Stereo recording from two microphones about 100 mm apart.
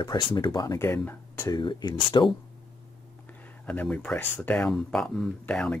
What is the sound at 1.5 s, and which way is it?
Speech, 50° left (ahead or behind).